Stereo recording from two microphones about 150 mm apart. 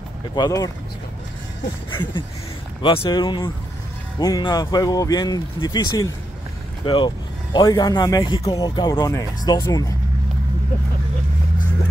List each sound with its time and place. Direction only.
0.4 s speech: 20° left (ahead or behind)
1.9 s speech: 30° left (ahead or behind)